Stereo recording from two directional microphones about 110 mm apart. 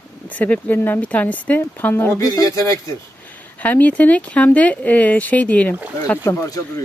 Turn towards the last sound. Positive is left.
turn(degrees=30)  # may be behind; listen again after turning